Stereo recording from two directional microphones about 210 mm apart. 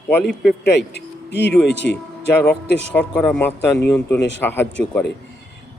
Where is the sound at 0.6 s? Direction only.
55° left (ahead or behind).